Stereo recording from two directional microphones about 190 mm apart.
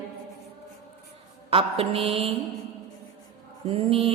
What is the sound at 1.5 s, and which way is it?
Mantra, 30° right (ahead or behind).